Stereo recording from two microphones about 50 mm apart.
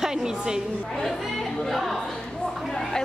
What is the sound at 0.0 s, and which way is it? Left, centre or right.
Speech, centre.